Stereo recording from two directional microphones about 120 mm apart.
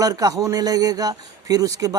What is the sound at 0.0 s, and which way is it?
A man's voice, 30° right (ahead or behind).